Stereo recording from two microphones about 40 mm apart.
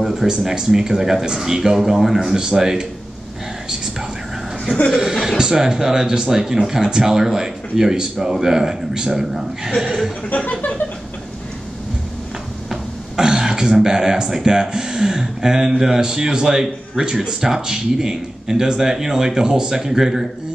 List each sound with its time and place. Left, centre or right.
0.0 s a sound: centre
0.6 s speech: centre
2.1 s speech: centre
4.9 s speech: centre
10.3 s a sound: left
12.6 s speech: centre